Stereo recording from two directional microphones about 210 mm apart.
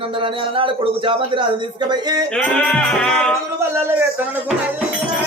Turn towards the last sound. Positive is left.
turn(degrees=5)  # may be behind; listen again after turning